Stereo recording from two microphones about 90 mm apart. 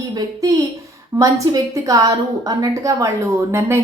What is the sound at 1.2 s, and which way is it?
A woman's voice, 40° right (ahead or behind).